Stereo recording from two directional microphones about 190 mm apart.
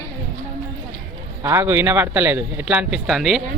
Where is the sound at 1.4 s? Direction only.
15° right (ahead or behind).